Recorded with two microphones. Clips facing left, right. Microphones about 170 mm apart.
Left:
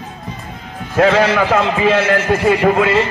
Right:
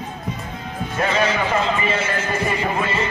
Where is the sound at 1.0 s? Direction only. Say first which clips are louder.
Left 8 dB; 75° left (ahead or behind).